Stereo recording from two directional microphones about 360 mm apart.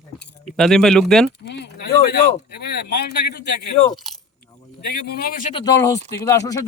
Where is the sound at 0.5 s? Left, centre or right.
Centre.